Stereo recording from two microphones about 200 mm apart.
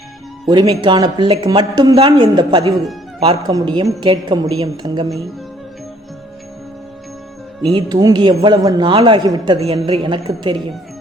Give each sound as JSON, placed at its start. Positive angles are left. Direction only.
{"t": 0.7, "sound": "speech", "side_deg": -20}
{"t": 7.7, "sound": "speech", "side_deg": -20}